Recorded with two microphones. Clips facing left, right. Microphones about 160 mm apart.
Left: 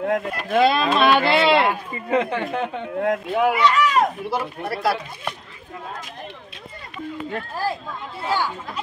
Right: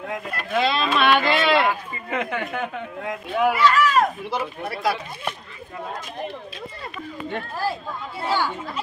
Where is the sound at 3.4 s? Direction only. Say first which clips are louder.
Right 1 dB; 20° left (ahead or behind).